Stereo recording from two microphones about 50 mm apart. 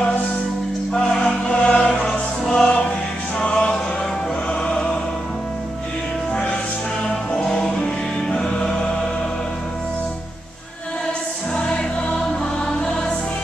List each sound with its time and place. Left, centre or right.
0.9 s choir: centre
3.3 s music: centre
7.1 s music: centre
11.5 s music: centre